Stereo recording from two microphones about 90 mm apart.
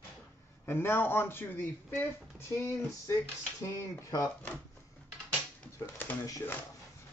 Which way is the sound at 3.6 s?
35° left (ahead or behind).